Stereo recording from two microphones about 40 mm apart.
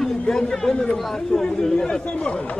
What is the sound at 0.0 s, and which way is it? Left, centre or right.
A man's voice, centre.